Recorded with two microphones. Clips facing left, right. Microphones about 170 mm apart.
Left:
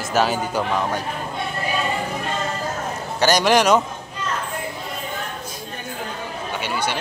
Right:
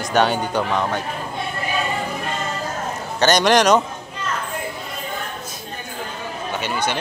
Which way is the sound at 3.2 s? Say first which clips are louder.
Right 1 dB; 10° left (ahead or behind).